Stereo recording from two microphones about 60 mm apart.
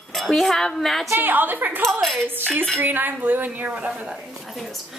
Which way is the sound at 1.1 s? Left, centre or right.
Right.